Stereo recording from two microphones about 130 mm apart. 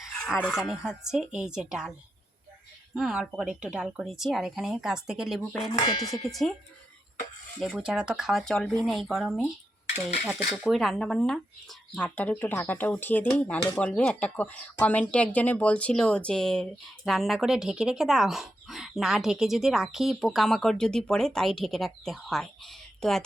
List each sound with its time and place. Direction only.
0.3 s speech: 5° right (ahead or behind)
2.9 s speech: 5° right (ahead or behind)
5.7 s clang: 30° left (ahead or behind)
6.2 s speech: centre (ahead or behind)
7.6 s speech: 5° right (ahead or behind)